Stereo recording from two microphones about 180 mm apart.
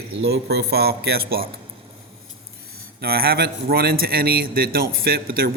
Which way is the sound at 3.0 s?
60° right (ahead or behind).